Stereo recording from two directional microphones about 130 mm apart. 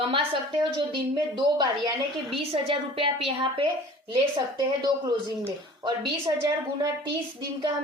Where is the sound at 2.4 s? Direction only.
50° right (ahead or behind).